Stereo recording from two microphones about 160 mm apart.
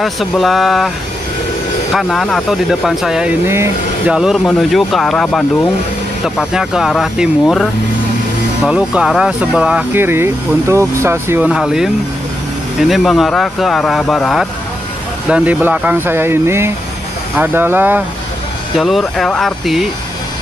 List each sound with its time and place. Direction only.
0.0 s speech: centre (ahead or behind)
2.0 s speech: centre (ahead or behind)
3.4 s speech: 15° right (ahead or behind)
4.1 s speech: 5° right (ahead or behind)
8.6 s speech: 5° right (ahead or behind)
18.8 s speech: centre (ahead or behind)